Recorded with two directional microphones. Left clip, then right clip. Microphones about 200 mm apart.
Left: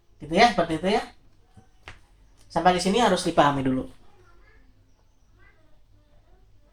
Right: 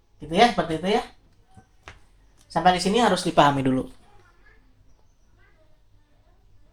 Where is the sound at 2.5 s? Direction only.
30° right (ahead or behind); by 3.8 s 45° right (ahead or behind).